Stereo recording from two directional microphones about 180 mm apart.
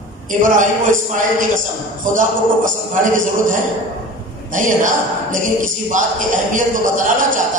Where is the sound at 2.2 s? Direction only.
45° right (ahead or behind).